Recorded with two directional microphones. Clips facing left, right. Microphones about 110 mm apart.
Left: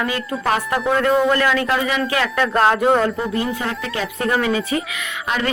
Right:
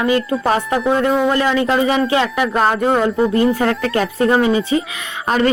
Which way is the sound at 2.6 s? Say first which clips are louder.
Left 1 dB; centre (ahead or behind).